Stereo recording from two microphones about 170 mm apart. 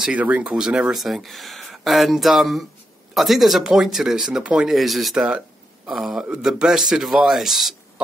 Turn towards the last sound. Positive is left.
turn(degrees=0)  # may be behind; listen again after turning